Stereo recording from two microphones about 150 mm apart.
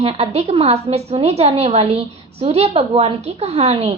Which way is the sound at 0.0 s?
45° right (ahead or behind).